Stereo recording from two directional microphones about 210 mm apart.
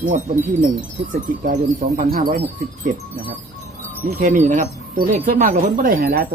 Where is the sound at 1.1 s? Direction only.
40° right (ahead or behind).